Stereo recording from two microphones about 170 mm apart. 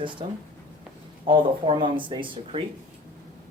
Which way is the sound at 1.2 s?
30° right (ahead or behind).